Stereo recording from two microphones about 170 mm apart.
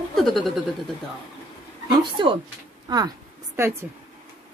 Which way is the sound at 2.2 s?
25° right (ahead or behind).